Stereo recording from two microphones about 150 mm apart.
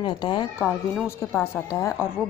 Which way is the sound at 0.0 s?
30° left (ahead or behind).